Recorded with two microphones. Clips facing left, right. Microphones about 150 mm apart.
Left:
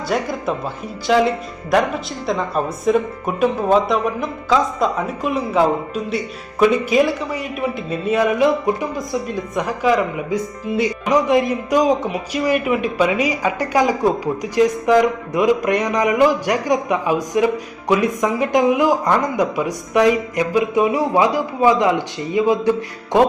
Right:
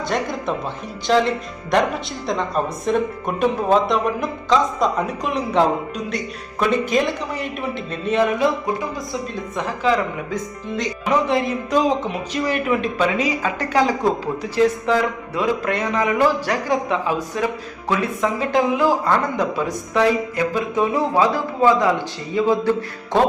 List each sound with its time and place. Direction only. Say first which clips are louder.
0.1 s speech: left 3 dB; 5° left (ahead or behind)